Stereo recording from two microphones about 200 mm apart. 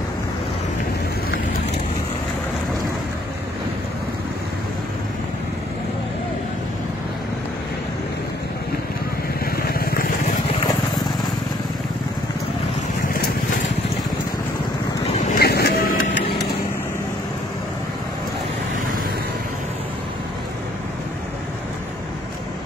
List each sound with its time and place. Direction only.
9.4 s vehicle: 50° left (ahead or behind)
15.1 s vehicle: 50° left (ahead or behind)